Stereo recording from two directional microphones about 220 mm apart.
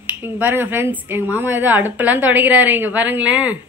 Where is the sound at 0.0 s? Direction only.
10° right (ahead or behind).